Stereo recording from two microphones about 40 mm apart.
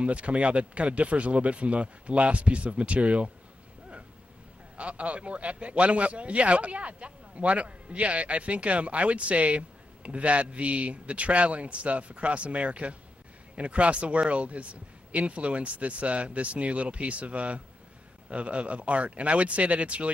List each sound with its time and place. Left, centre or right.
0.0 s a man's voice: right
4.7 s a man's voice: right